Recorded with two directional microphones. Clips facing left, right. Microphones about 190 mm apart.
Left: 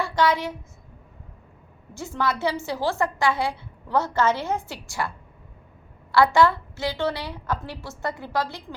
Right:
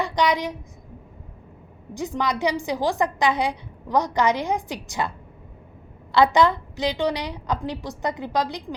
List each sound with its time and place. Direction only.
0.0 s a woman's voice: 15° right (ahead or behind)
1.9 s a woman's voice: 15° right (ahead or behind)